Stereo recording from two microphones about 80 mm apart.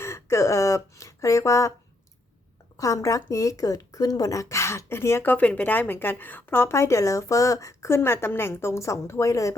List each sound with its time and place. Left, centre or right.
0.0 s a sound: left
2.7 s speech: left
5.3 s speech: centre; by 9.6 s left